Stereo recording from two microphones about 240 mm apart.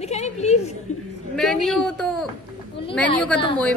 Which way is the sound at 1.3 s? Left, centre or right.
Centre.